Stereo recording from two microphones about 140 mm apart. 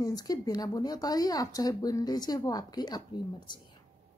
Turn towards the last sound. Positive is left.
turn(degrees=35)  # may be behind; listen again after turning